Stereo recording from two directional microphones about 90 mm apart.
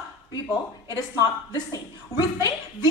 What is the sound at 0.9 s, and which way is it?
A woman's voice, 45° left (ahead or behind).